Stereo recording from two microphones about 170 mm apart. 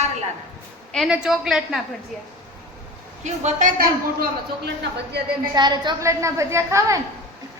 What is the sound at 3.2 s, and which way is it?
A man's voice, 45° right (ahead or behind).